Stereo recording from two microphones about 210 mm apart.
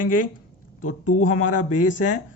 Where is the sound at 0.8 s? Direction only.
90° left.